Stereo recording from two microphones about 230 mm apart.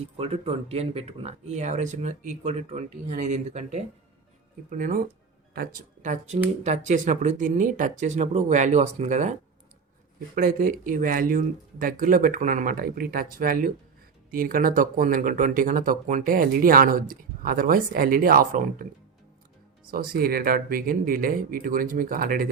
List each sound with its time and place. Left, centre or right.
0.2 s speech: right
10.3 s speech: right
19.9 s speech: right